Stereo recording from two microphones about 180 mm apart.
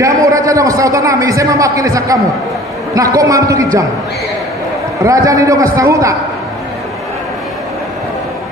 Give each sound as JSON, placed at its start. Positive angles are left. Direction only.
{"t": 0.0, "sound": "a man's voice", "side_deg": -20}
{"t": 5.0, "sound": "a man's voice", "side_deg": -20}